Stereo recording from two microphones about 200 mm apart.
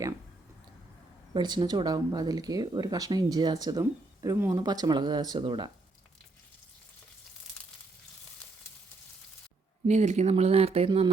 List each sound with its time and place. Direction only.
1.3 s speech: 20° right (ahead or behind)
9.8 s speech: 35° right (ahead or behind)